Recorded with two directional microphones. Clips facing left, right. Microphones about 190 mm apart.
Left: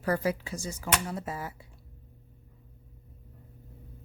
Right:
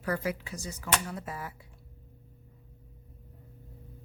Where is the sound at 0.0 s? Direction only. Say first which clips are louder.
Left 3 dB; 35° left (ahead or behind).